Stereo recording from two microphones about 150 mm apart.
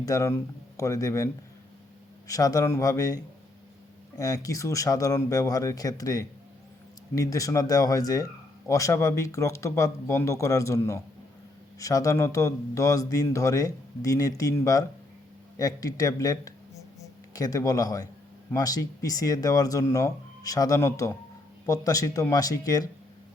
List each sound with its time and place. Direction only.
0.0 s speech: 20° left (ahead or behind)
4.2 s speech: 20° left (ahead or behind)